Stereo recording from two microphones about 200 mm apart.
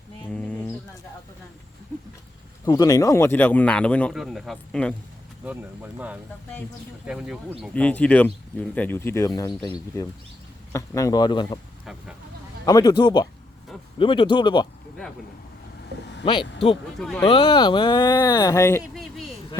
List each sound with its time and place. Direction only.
0.3 s a sound: 5° left (ahead or behind)
2.6 s speech: 20° left (ahead or behind)
5.5 s speech: 10° right (ahead or behind); by 9.5 s 15° left (ahead or behind)
10.7 s speech: 15° left (ahead or behind)
12.6 s speech: 20° left (ahead or behind)
16.2 s speech: 25° left (ahead or behind)
17.0 s speech: centre (ahead or behind)
17.2 s speech: 25° left (ahead or behind)
18.8 s speech: centre (ahead or behind)